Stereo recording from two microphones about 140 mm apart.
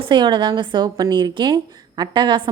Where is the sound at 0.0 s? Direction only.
35° right (ahead or behind).